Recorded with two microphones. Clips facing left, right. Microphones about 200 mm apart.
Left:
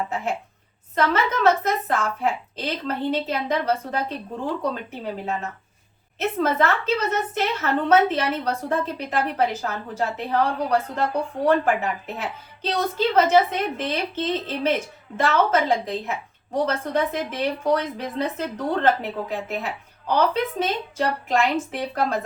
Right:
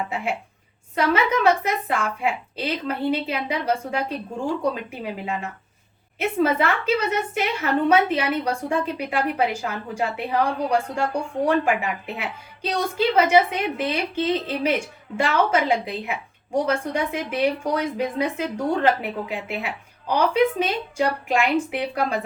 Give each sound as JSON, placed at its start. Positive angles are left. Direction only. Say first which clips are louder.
{"t": 0.9, "sound": "a woman's voice", "louder": "right 1 dB", "side_deg": -10}